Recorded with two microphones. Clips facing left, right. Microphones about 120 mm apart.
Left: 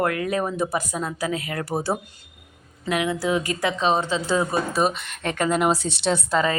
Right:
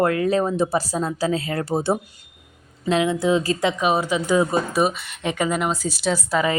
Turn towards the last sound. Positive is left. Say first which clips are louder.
# even
turn(degrees=-5)  # may be behind; listen again after turning